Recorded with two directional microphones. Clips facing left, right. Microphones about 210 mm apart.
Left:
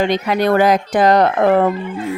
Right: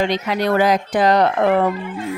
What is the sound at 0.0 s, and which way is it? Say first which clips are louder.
Speech: left 3 dB; 50° left (ahead or behind).